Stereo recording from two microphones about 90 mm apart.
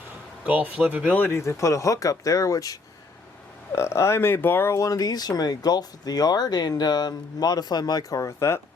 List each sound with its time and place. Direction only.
0.4 s a man's voice: 20° right (ahead or behind)
1.1 s speech: 20° left (ahead or behind)
1.4 s speech: 35° left (ahead or behind)
8.2 s speech: 30° left (ahead or behind)